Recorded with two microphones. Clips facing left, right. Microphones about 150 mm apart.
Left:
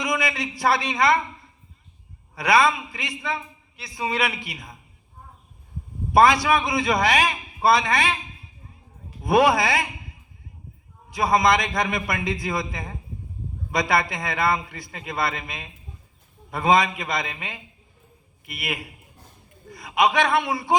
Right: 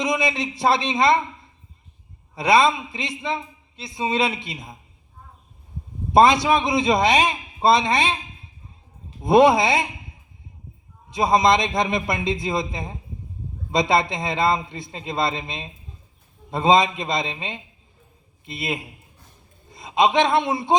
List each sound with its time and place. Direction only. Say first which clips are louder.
0.0 s a man's voice: right 3 dB; 20° right (ahead or behind)
2.3 s a man's voice: right 2 dB; 20° right (ahead or behind)
6.1 s a man's voice: right 2 dB; 20° right (ahead or behind)
11.1 s a man's voice: right 2 dB; 20° right (ahead or behind)